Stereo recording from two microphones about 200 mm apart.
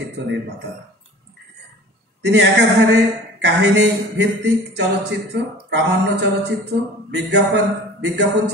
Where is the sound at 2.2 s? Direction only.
60° right (ahead or behind).